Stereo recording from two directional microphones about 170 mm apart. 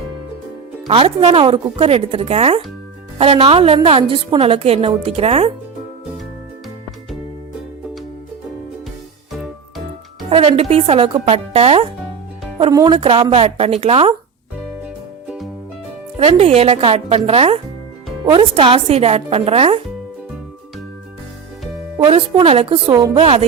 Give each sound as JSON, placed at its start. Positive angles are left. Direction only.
{"t": 0.9, "sound": "speech", "side_deg": -35}
{"t": 9.3, "sound": "music", "side_deg": 0}
{"t": 10.2, "sound": "speech", "side_deg": -35}
{"t": 16.1, "sound": "speech", "side_deg": -35}
{"t": 21.9, "sound": "speech", "side_deg": -30}
{"t": 22.9, "sound": "a woman's voice", "side_deg": -20}